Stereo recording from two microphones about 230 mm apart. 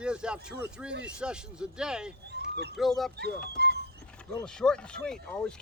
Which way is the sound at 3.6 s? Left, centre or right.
Right.